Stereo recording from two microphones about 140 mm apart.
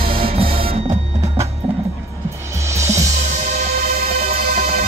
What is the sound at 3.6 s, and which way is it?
Music, 50° right (ahead or behind).